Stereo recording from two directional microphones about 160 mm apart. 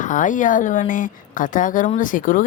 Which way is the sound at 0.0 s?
55° left (ahead or behind).